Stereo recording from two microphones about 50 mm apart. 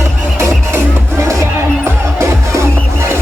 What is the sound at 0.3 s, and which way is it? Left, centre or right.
Music, right.